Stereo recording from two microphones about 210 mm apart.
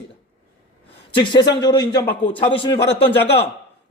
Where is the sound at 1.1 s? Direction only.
20° left (ahead or behind).